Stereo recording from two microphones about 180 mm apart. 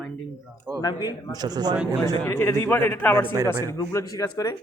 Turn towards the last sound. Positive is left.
turn(degrees=20)  # may be behind; listen again after turning